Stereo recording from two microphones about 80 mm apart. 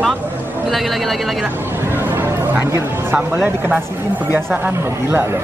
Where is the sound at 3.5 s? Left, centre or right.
Right.